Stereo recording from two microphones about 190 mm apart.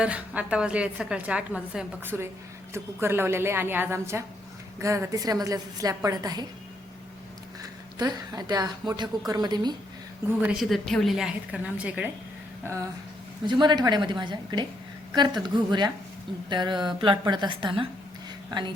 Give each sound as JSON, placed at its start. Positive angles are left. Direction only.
{"t": 0.0, "sound": "a woman's voice", "side_deg": -5}
{"t": 7.6, "sound": "a woman's voice", "side_deg": -20}
{"t": 10.4, "sound": "a woman's voice", "side_deg": -5}
{"t": 13.4, "sound": "a woman's voice", "side_deg": -25}